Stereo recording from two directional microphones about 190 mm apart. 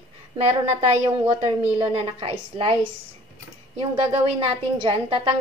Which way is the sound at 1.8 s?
25° right (ahead or behind).